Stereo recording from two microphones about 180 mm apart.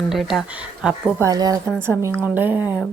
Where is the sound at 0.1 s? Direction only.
Centre (ahead or behind).